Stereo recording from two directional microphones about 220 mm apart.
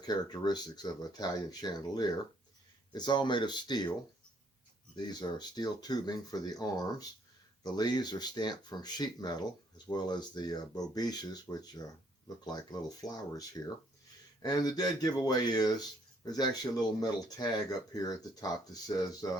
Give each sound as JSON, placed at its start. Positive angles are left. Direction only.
{"t": 0.0, "sound": "speech", "side_deg": 20}
{"t": 4.9, "sound": "speech", "side_deg": 20}